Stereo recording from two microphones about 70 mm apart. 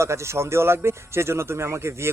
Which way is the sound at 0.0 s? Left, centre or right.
Right.